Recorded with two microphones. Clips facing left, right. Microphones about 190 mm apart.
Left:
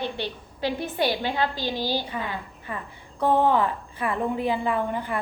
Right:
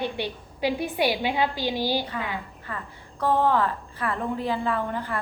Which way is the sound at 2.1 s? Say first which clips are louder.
Even; 20° left (ahead or behind).